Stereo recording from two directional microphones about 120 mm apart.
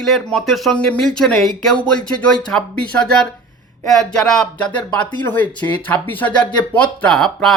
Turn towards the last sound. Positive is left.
turn(degrees=5)  # may be behind; listen again after turning